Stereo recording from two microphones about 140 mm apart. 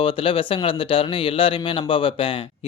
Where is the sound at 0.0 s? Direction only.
40° left (ahead or behind).